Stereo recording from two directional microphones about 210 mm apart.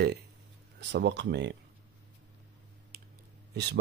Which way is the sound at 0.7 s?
55° right (ahead or behind).